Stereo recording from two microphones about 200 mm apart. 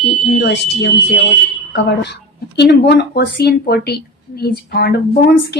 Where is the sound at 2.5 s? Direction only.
55° left (ahead or behind).